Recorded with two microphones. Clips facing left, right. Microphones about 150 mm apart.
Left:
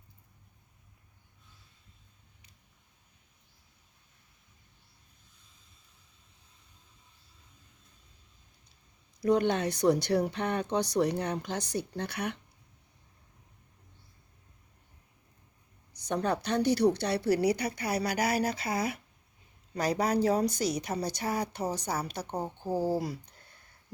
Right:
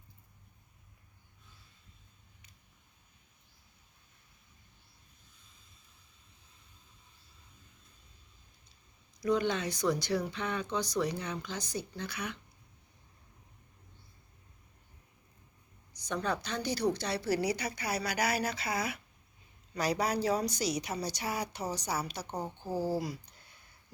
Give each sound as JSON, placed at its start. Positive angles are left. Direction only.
{"t": 9.2, "sound": "speech", "side_deg": 60}
{"t": 15.9, "sound": "a sound", "side_deg": 60}
{"t": 16.2, "sound": "a woman's voice", "side_deg": 60}
{"t": 22.4, "sound": "speech", "side_deg": 15}
{"t": 23.0, "sound": "speech", "side_deg": 55}